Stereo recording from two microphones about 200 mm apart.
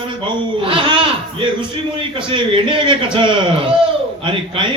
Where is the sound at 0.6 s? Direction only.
25° right (ahead or behind).